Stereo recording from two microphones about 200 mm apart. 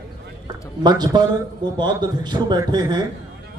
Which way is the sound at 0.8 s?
20° right (ahead or behind).